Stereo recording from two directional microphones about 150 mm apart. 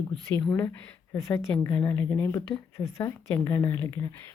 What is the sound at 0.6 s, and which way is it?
A woman's voice, 15° left (ahead or behind).